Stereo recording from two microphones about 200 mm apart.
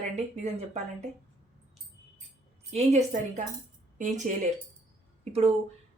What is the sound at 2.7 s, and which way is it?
A woman's voice, 35° right (ahead or behind).